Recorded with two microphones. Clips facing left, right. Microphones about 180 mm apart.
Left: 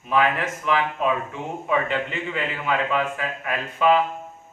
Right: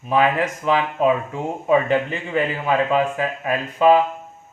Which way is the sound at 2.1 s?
35° right (ahead or behind).